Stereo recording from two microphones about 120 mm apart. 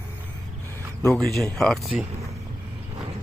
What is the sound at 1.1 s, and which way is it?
Speech, centre (ahead or behind).